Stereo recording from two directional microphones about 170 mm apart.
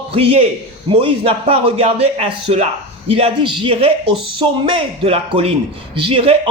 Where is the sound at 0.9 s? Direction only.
30° right (ahead or behind).